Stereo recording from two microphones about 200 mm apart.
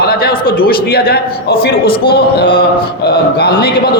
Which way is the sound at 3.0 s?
50° left (ahead or behind).